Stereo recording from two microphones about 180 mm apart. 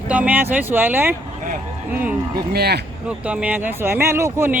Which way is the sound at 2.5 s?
65° right (ahead or behind).